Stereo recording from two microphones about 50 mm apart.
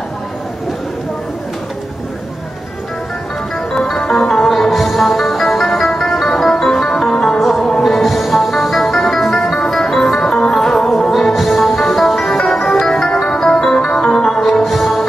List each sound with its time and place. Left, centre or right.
3.7 s music: centre